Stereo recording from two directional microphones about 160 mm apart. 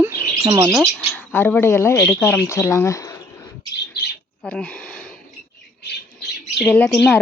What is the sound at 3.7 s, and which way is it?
Bird, 90° left.